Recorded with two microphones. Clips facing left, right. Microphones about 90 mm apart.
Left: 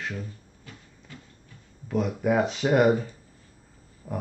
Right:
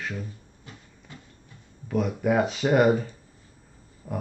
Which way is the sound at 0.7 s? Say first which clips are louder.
Even; 25° right (ahead or behind).